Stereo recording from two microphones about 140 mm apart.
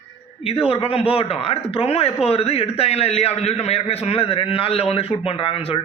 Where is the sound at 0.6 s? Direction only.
45° left (ahead or behind).